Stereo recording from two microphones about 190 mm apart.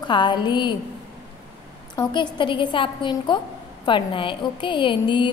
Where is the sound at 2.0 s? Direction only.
25° left (ahead or behind).